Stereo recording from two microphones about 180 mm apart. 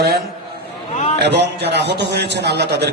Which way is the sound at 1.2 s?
70° right (ahead or behind).